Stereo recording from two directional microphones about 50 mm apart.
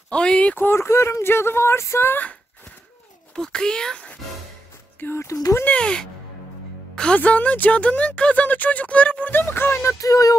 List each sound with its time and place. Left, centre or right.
0.1 s speech: centre
0.7 s speech: left
1.2 s speech: left
3.3 s a child's voice: centre
5.1 s speech: left
5.7 s speech: left
7.2 s speech: left
9.3 s speech: left